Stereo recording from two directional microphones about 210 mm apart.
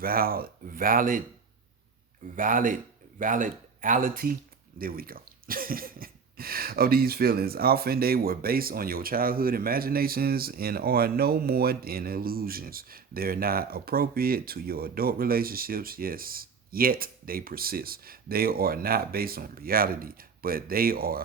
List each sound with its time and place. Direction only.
0.0 s speech: 45° right (ahead or behind)
2.3 s speech: 40° right (ahead or behind)